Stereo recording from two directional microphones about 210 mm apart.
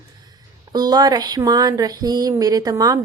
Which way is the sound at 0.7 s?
20° right (ahead or behind).